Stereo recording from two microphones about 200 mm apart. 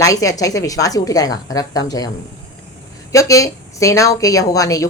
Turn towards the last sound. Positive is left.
turn(degrees=15)  # may be behind; listen again after turning